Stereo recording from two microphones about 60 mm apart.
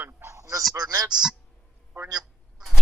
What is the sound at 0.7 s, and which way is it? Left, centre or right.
Speech, right.